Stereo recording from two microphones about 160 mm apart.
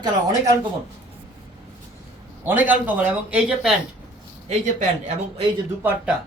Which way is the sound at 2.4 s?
10° right (ahead or behind).